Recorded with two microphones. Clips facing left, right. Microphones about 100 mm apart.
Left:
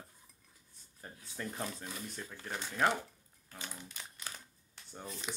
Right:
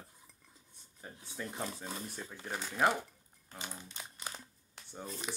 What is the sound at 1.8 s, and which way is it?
Speech, 25° right (ahead or behind).